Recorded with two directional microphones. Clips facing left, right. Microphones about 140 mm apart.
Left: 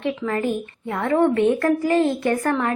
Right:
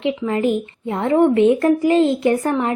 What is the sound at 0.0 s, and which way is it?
A woman's voice, 20° right (ahead or behind).